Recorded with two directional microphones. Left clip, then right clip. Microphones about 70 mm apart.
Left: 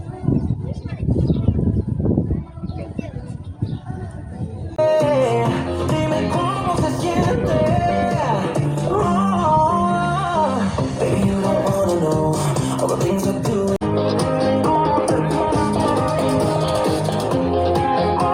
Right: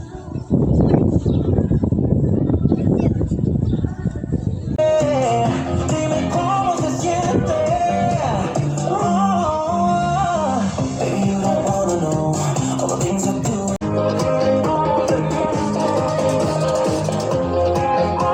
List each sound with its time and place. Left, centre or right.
4.8 s music: centre; by 18.3 s left